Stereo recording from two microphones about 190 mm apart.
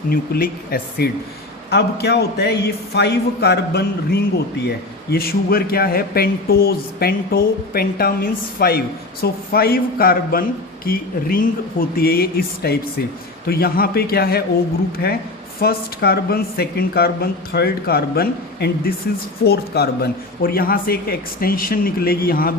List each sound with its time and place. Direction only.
0.1 s speech: 50° left (ahead or behind)
15.6 s speech: 55° left (ahead or behind)